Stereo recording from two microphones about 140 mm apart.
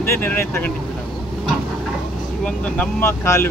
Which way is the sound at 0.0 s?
15° left (ahead or behind).